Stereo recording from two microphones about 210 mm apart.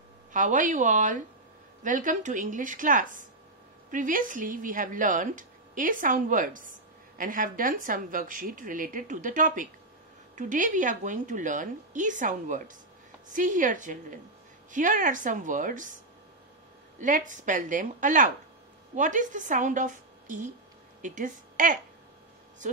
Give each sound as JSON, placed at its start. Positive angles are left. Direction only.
{"t": 0.3, "sound": "speech", "side_deg": -40}
{"t": 17.0, "sound": "speech", "side_deg": -35}